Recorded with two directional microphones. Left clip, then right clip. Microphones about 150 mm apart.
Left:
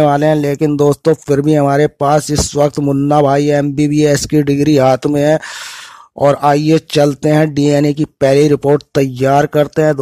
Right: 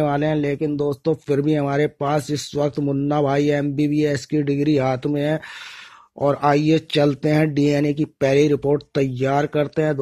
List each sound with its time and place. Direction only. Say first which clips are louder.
0.0 s speech: left 9 dB; 40° left (ahead or behind); by 1.1 s 55° left (ahead or behind)
1.1 s speech: left 8 dB; 45° left (ahead or behind)
8.5 s speech: left 8 dB; 50° left (ahead or behind)